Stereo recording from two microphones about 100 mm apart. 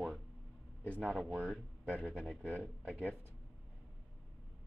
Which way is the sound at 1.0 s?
5° right (ahead or behind).